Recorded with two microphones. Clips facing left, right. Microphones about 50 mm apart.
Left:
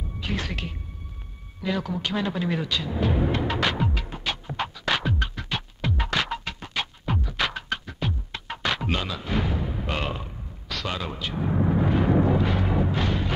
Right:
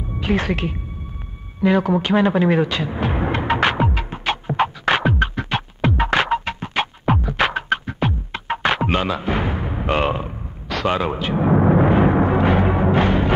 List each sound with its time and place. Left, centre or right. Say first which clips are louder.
0.2 s speech: right 10 dB; right
1.6 s timpani: right 11 dB; right